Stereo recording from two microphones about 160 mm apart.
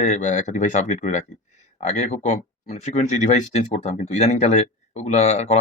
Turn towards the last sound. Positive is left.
turn(degrees=45)  # may be behind; listen again after turning